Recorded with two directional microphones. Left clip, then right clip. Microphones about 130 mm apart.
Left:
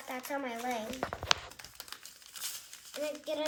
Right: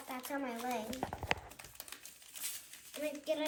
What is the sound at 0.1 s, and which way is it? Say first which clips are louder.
Speech: left 3 dB; 15° left (ahead or behind).